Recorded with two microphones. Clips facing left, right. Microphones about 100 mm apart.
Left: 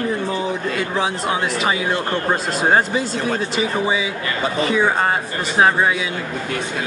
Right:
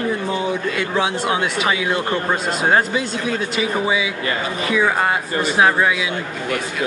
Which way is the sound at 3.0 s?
40° left (ahead or behind).